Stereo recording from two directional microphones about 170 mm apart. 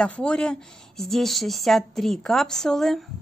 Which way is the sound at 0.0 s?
5° left (ahead or behind).